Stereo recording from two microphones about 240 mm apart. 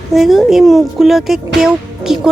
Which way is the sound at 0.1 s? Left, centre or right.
Centre.